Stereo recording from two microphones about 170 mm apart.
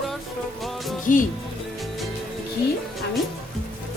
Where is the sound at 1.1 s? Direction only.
50° left (ahead or behind).